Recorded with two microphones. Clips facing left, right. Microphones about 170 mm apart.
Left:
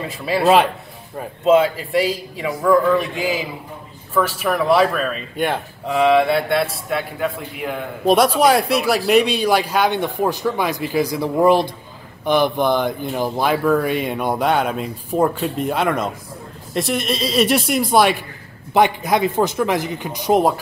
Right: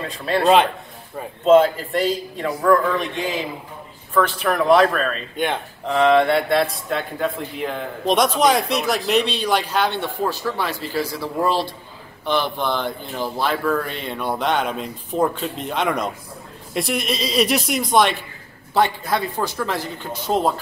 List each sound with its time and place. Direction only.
0.2 s a man's voice: 5° left (ahead or behind)
18.7 s speech: 15° left (ahead or behind)